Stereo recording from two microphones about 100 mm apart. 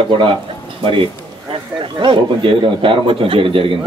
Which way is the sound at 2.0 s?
60° right (ahead or behind).